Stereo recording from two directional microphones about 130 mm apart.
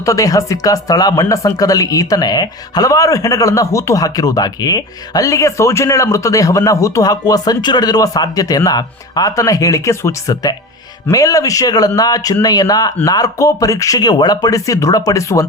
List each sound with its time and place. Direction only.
0.0 s speech: 25° left (ahead or behind)